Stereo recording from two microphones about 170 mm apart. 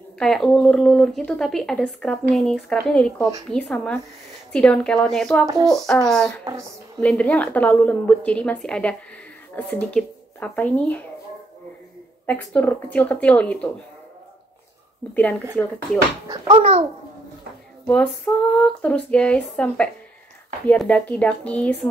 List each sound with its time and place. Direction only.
0.2 s speech: 5° left (ahead or behind)
5.5 s speech: 20° right (ahead or behind)
6.0 s speech: 5° left (ahead or behind)
7.0 s female singing: 5° left (ahead or behind)
12.3 s female singing: 10° left (ahead or behind)
15.1 s female singing: 10° left (ahead or behind)
16.3 s a child's voice: 30° right (ahead or behind)
17.8 s female singing: 5° left (ahead or behind)